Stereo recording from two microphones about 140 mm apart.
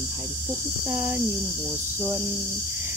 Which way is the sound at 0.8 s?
15° right (ahead or behind).